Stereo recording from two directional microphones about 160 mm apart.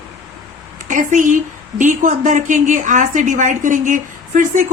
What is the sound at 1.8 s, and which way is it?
Speech, 50° right (ahead or behind).